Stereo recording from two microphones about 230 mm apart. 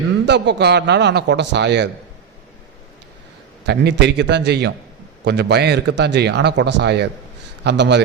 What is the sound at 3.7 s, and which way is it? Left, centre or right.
A man's voice, right.